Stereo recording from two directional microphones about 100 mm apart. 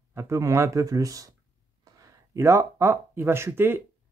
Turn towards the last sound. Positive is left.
turn(degrees=-25)  # may be behind; listen again after turning